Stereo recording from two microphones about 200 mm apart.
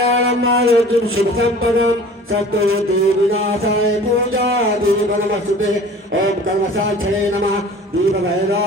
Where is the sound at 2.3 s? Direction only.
90° right.